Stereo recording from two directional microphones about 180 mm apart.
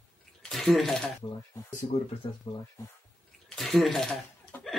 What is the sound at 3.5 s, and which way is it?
Speech, centre (ahead or behind).